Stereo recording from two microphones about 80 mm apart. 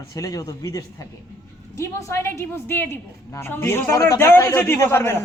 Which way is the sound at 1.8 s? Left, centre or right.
Left.